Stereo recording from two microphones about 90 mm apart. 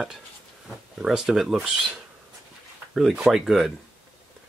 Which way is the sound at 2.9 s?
5° right (ahead or behind).